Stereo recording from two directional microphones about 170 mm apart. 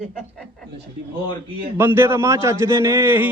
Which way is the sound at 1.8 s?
15° right (ahead or behind).